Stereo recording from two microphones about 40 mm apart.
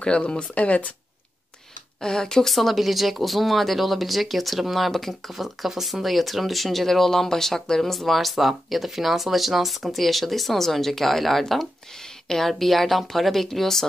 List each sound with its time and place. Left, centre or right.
0.2 s speech: left
2.0 s speech: centre
2.4 s speech: centre